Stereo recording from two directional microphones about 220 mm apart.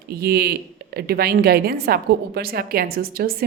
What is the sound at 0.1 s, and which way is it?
Speech, 45° right (ahead or behind).